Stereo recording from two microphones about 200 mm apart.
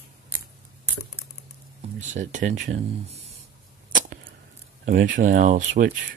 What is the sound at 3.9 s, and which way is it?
Arrow, 40° right (ahead or behind).